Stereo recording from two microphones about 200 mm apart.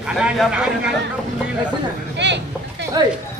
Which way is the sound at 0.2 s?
5° right (ahead or behind).